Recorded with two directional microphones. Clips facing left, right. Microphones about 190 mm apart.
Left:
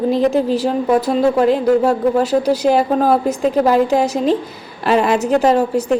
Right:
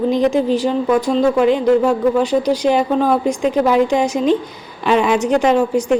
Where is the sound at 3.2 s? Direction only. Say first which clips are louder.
Left 1 dB; 5° left (ahead or behind).